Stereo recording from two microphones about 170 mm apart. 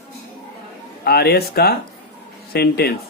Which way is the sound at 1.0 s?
70° left (ahead or behind).